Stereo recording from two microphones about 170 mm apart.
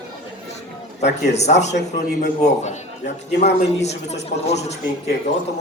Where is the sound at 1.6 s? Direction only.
45° left (ahead or behind).